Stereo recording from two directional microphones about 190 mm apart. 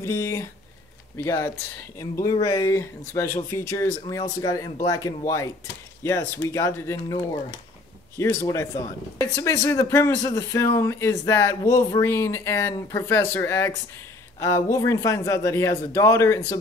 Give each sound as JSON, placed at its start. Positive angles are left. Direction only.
{"t": 0.0, "sound": "speech", "side_deg": 15}
{"t": 8.2, "sound": "speech", "side_deg": 15}